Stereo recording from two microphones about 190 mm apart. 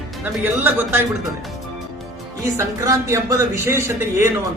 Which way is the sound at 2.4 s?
15° right (ahead or behind).